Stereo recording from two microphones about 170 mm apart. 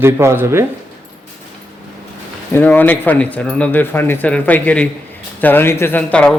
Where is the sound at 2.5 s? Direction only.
10° left (ahead or behind).